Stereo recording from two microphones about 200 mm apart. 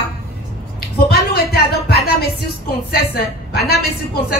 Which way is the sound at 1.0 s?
50° left (ahead or behind).